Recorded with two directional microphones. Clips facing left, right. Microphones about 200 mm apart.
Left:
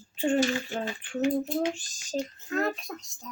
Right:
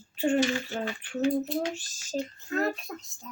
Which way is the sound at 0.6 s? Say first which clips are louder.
Even; 20° left (ahead or behind).